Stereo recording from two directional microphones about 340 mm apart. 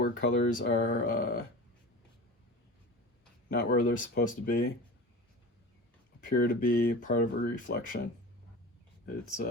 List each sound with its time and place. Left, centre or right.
0.0 s speech: left
3.5 s speech: left
6.2 s speech: left
9.0 s speech: left